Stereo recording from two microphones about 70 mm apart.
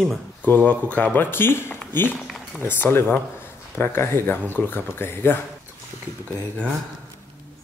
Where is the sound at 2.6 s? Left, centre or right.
Left.